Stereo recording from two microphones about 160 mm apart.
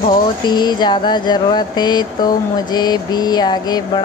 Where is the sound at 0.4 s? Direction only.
25° left (ahead or behind).